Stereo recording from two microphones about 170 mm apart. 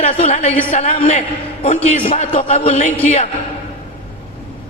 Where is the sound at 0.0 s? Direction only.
40° left (ahead or behind).